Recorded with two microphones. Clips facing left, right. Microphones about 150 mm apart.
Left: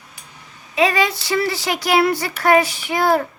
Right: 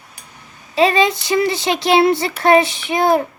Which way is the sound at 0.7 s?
30° right (ahead or behind).